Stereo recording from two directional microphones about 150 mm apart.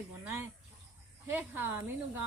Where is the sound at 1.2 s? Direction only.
15° right (ahead or behind).